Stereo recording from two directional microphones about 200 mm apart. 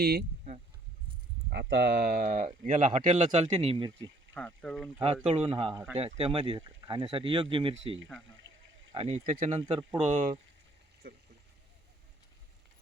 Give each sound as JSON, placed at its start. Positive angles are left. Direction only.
{"t": 0.0, "sound": "speech", "side_deg": -50}
{"t": 1.5, "sound": "speech", "side_deg": -55}
{"t": 4.4, "sound": "speech", "side_deg": 5}
{"t": 5.2, "sound": "speech", "side_deg": -30}
{"t": 8.4, "sound": "a sound", "side_deg": -75}
{"t": 8.9, "sound": "speech", "side_deg": -35}
{"t": 11.0, "sound": "speech", "side_deg": -50}